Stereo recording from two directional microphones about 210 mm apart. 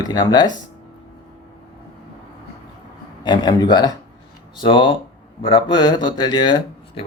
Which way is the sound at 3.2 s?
20° left (ahead or behind).